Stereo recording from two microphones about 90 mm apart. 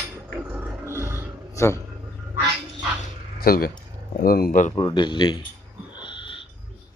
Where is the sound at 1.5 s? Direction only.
30° left (ahead or behind).